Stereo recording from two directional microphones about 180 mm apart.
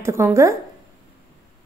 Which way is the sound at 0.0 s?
15° right (ahead or behind).